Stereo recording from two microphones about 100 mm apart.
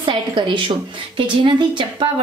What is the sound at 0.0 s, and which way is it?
A woman's voice, 60° right (ahead or behind).